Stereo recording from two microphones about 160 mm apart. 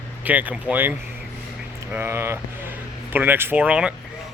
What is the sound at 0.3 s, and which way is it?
Speech, 10° right (ahead or behind).